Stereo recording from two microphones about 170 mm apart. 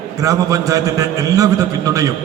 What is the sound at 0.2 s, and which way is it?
A man's voice, 20° right (ahead or behind).